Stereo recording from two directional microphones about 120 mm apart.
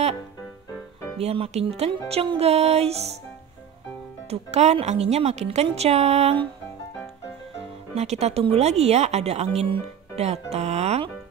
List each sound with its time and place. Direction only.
1.1 s speech: 55° right (ahead or behind)
4.3 s speech: 65° right (ahead or behind)
7.9 s speech: 65° right (ahead or behind)